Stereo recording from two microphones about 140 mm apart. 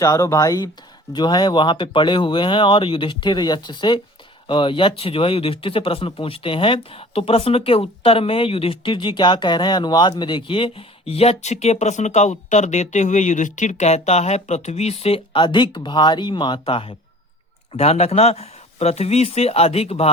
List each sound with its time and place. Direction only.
0.0 s speech: 25° left (ahead or behind); by 20.1 s 45° left (ahead or behind)